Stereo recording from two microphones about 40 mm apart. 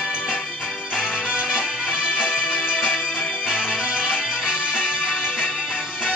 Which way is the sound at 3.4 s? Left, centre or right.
Centre.